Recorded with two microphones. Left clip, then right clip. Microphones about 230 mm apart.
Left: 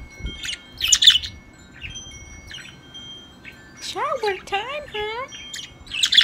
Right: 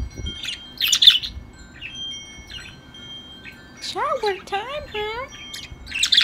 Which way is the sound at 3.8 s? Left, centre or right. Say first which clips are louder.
Right 1 dB; centre.